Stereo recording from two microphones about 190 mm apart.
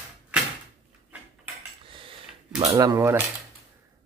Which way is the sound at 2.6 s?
20° right (ahead or behind).